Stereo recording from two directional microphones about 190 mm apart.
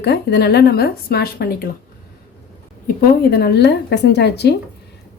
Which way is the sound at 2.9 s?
55° left (ahead or behind).